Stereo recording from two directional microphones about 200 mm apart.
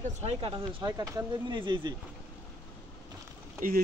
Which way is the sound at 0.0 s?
30° right (ahead or behind).